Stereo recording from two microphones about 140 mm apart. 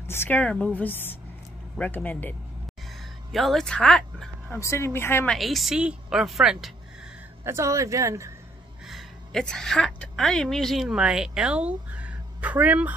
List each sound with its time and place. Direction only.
0.0 s a woman's voice: 15° left (ahead or behind)
3.3 s speech: centre (ahead or behind)
4.6 s a woman's voice: 20° left (ahead or behind)
5.3 s a woman's voice: centre (ahead or behind)
7.4 s speech: 20° right (ahead or behind)
8.8 s a woman's voice: centre (ahead or behind)